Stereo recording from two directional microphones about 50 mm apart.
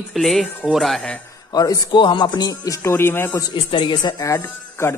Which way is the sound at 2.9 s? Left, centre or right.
Left.